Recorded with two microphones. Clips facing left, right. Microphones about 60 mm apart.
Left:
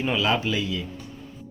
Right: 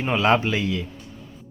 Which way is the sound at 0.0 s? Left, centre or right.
Right.